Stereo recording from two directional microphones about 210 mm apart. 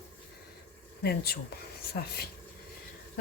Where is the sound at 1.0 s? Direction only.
50° left (ahead or behind).